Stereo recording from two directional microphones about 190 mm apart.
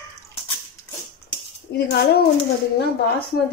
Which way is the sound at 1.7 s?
65° left (ahead or behind).